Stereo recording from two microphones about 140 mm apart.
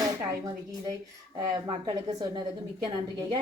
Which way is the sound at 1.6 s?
30° right (ahead or behind).